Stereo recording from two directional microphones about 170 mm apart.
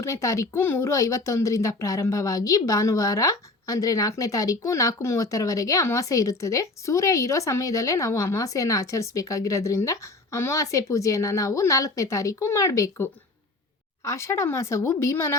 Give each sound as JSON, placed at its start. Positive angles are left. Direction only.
{"t": 0.0, "sound": "speech", "side_deg": 15}